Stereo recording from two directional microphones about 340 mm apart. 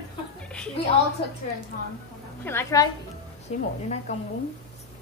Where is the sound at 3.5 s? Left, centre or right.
Centre.